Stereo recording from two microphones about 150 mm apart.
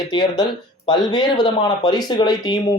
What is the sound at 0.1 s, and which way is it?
Speech, 30° left (ahead or behind).